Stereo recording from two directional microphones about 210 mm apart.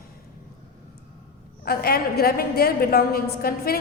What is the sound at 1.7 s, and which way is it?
A woman's voice, 45° left (ahead or behind).